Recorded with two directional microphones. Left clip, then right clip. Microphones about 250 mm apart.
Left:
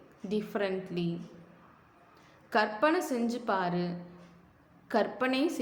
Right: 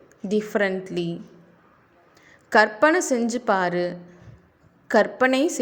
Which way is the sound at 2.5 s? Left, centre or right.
Right.